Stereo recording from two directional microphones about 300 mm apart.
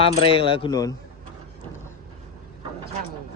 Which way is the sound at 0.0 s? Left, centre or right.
Centre.